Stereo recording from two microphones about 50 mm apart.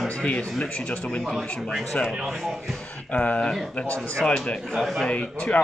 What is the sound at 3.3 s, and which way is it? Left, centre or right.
Speech, left.